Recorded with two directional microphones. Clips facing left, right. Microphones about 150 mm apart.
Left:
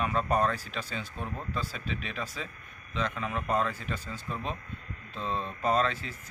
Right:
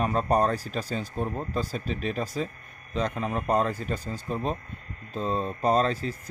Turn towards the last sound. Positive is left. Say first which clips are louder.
# right 4 dB
turn(degrees=-40)  # may be behind; listen again after turning